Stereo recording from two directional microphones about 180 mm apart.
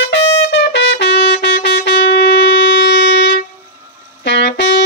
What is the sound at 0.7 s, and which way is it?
Music, 80° left.